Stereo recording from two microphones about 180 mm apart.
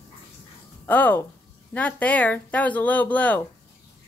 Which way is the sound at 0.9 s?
10° left (ahead or behind).